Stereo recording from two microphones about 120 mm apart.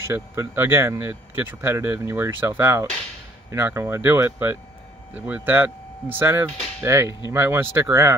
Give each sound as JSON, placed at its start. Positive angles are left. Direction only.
{"t": 0.0, "sound": "speech", "side_deg": -20}
{"t": 7.1, "sound": "speech", "side_deg": 40}
{"t": 7.3, "sound": "speech", "side_deg": -20}